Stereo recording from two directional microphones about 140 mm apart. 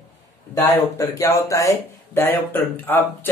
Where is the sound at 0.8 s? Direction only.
25° left (ahead or behind).